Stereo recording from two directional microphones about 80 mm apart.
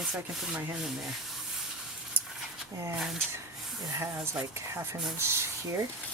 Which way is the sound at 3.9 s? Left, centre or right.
Right.